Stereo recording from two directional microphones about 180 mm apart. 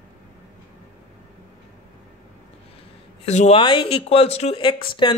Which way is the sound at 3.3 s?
35° left (ahead or behind).